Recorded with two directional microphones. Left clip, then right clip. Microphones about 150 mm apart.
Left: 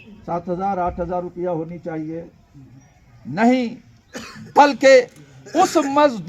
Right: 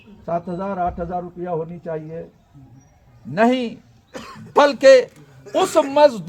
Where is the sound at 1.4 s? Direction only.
25° right (ahead or behind).